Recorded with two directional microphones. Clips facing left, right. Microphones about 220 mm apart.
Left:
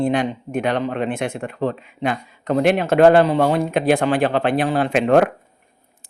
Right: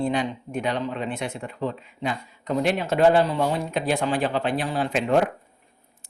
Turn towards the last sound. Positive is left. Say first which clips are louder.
# left 6 dB
turn(degrees=70)  # may be behind; listen again after turning